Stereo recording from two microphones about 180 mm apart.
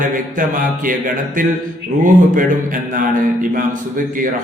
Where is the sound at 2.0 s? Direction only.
45° right (ahead or behind).